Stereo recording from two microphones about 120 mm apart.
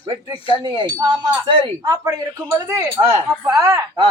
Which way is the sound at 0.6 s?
45° right (ahead or behind).